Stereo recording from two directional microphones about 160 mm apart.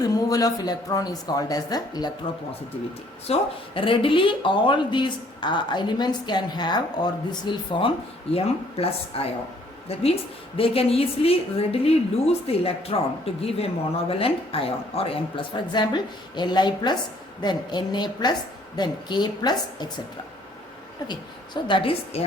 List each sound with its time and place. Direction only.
0.0 s speech: 20° left (ahead or behind)
3.3 s a woman's voice: 40° left (ahead or behind)
21.1 s a woman's voice: 30° left (ahead or behind)